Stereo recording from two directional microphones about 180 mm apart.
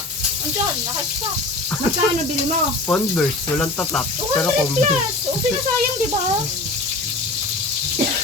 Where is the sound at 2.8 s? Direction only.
10° left (ahead or behind).